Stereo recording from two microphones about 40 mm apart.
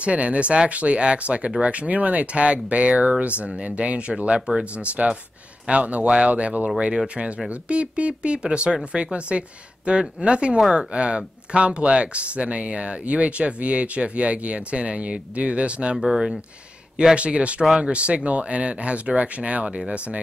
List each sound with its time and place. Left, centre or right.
0.0 s speech: right
16.0 s speech: centre
17.1 s speech: right